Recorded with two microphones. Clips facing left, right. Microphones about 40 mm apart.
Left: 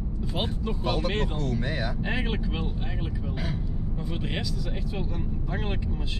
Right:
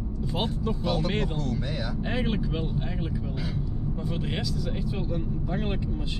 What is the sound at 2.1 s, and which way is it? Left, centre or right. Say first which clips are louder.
Speech: right 2 dB; centre.